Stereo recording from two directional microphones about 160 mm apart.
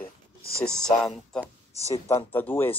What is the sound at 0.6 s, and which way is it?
A man's voice, 5° left (ahead or behind).